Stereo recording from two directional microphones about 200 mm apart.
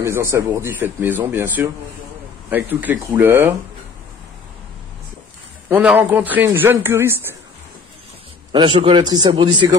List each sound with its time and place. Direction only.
0.0 s a man's voice: 15° right (ahead or behind)
5.7 s a man's voice: 5° right (ahead or behind)
8.5 s a man's voice: 25° right (ahead or behind)